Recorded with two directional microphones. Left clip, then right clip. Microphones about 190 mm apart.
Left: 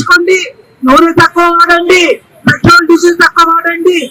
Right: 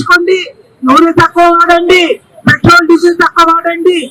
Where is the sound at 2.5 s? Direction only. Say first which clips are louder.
Even; 15° right (ahead or behind).